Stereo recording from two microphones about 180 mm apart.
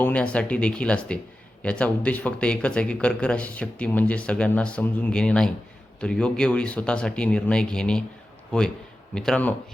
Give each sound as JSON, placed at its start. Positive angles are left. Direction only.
{"t": 0.0, "sound": "speech", "side_deg": 5}
{"t": 9.1, "sound": "speech", "side_deg": 5}